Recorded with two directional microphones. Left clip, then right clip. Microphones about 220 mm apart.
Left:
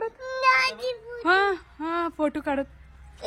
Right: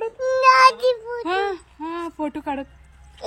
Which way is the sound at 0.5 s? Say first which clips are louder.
Right 8 dB; 10° right (ahead or behind).